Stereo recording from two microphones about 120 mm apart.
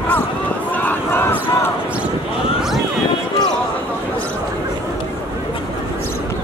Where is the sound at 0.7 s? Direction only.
15° left (ahead or behind).